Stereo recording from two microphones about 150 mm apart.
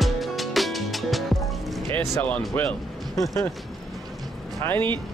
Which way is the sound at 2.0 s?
15° left (ahead or behind).